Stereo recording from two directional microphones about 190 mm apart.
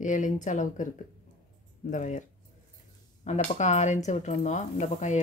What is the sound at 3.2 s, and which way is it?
Speech, 40° left (ahead or behind).